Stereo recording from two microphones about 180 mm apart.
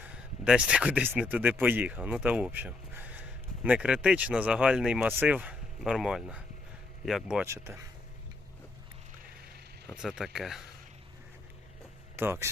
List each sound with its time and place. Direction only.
0.0 s speech: 5° right (ahead or behind)
7.4 s speech: 15° right (ahead or behind)
9.8 s speech: 5° right (ahead or behind)
12.1 s speech: 15° right (ahead or behind)